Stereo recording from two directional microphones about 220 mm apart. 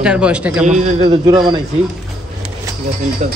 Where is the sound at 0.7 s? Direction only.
30° right (ahead or behind).